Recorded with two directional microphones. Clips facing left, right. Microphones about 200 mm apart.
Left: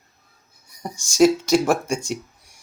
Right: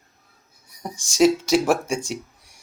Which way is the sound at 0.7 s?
Centre (ahead or behind).